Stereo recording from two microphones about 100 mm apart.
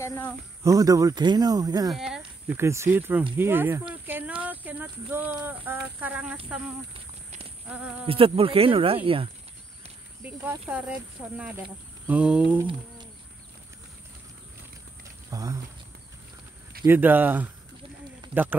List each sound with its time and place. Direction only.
0.0 s speech: 25° left (ahead or behind)
0.7 s speech: 35° right (ahead or behind)
1.9 s speech: 5° right (ahead or behind)
2.4 s speech: 25° right (ahead or behind)
7.7 s speech: 10° right (ahead or behind)
8.1 s speech: 65° right (ahead or behind)
10.2 s speech: 15° right (ahead or behind)
15.2 s speech: 35° right (ahead or behind)
16.8 s a man's voice: 20° right (ahead or behind)